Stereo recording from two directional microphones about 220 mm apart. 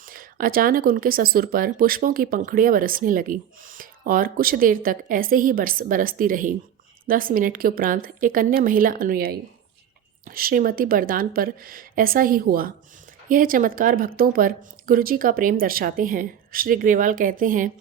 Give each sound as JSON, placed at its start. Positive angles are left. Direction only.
{"t": 0.0, "sound": "speech", "side_deg": -40}